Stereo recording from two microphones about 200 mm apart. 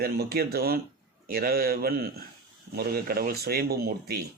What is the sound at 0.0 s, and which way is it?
Speech, 50° right (ahead or behind).